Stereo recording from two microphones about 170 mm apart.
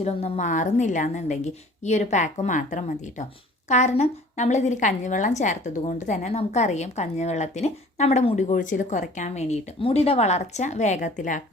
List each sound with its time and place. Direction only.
0.0 s a woman's voice: 40° left (ahead or behind)